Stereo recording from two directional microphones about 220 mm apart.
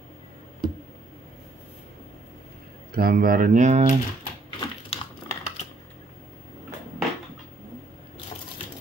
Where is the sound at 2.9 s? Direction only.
40° right (ahead or behind).